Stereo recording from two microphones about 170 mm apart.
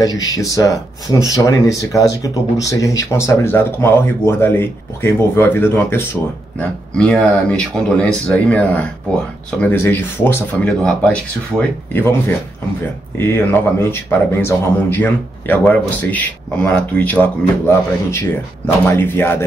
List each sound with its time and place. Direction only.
0.0 s speech: 20° left (ahead or behind)
13.2 s speech: 15° left (ahead or behind)